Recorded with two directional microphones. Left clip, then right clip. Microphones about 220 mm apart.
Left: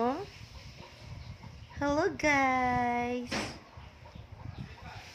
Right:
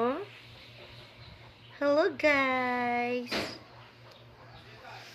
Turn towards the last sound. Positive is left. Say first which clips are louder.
# right 1 dB
turn(degrees=20)  # may be behind; listen again after turning